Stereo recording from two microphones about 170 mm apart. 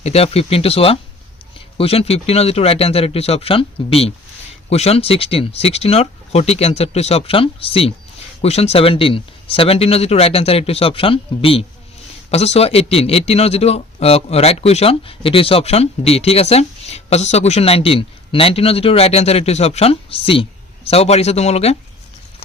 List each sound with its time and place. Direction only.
0.0 s a man's voice: 35° left (ahead or behind)